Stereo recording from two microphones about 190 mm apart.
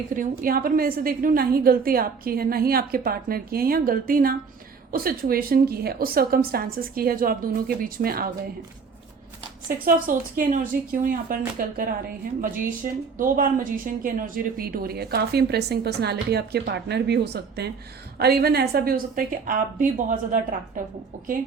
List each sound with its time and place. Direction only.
0.1 s a woman's voice: 45° right (ahead or behind)
9.6 s a woman's voice: 45° right (ahead or behind)